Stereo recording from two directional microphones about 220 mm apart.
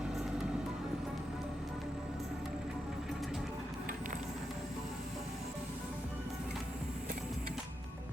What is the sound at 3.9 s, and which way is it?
Music, 35° right (ahead or behind).